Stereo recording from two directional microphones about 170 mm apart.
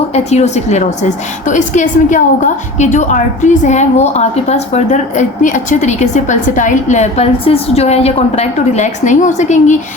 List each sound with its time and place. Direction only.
0.1 s a woman's voice: 40° left (ahead or behind)